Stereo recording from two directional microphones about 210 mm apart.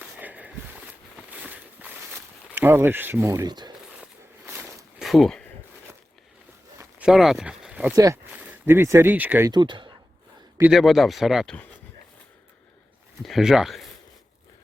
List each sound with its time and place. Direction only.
0.0 s walk: 5° right (ahead or behind)
5.0 s speech: centre (ahead or behind)
6.7 s speech: 5° right (ahead or behind)
9.5 s speech: 20° right (ahead or behind)
10.6 s speech: centre (ahead or behind)
13.2 s speech: centre (ahead or behind)